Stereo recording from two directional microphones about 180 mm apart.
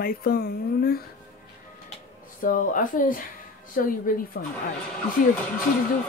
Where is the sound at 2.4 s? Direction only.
50° left (ahead or behind).